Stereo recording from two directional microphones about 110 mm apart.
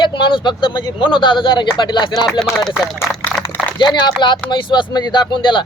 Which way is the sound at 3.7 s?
45° left (ahead or behind).